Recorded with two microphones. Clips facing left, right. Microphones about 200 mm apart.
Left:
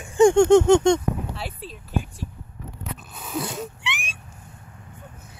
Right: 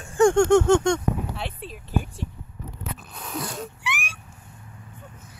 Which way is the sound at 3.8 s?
25° left (ahead or behind).